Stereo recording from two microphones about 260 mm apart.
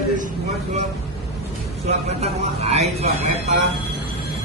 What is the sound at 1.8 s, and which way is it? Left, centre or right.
Speech, right.